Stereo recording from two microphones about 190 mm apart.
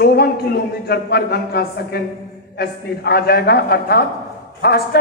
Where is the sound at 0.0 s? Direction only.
55° left (ahead or behind).